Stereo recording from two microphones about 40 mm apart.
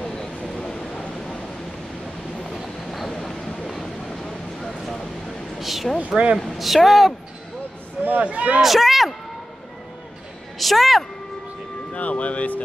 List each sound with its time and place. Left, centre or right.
0.4 s a sound: left
2.5 s train: centre
3.1 s a sound: centre
3.6 s vehicle: centre
5.6 s a sound: centre
5.9 s speech: right
6.4 s speech: centre
8.2 s speech: right
8.5 s speech: centre
10.6 s speech: centre
11.9 s speech: left